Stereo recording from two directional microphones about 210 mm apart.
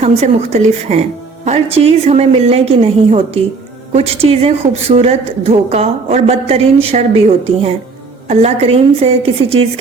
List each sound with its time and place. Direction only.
0.0 s a woman's voice: 30° right (ahead or behind)
8.3 s a woman's voice: 30° right (ahead or behind)